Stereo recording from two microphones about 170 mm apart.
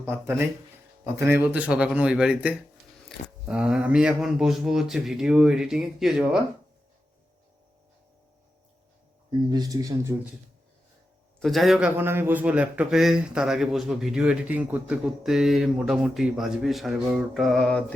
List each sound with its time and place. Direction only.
0.0 s a man's voice: 15° right (ahead or behind)
9.5 s speech: 20° right (ahead or behind)
11.3 s a man's voice: centre (ahead or behind)